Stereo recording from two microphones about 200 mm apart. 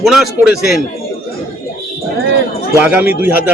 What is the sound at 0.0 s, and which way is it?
Speech, centre (ahead or behind).